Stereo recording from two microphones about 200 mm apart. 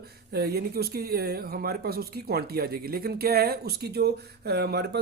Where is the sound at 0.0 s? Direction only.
50° right (ahead or behind).